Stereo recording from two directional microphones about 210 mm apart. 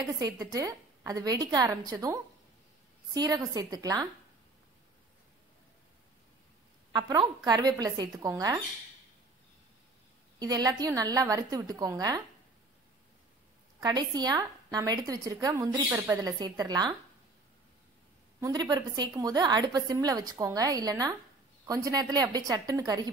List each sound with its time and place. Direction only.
0.2 s a woman's voice: 15° right (ahead or behind)
6.9 s a woman's voice: 20° right (ahead or behind)
10.4 s a woman's voice: 15° right (ahead or behind)
13.7 s a woman's voice: 20° right (ahead or behind)
18.4 s a woman's voice: 20° right (ahead or behind)